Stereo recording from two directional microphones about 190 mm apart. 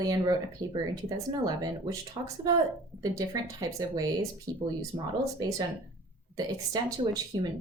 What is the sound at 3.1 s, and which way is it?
Speech, 20° right (ahead or behind).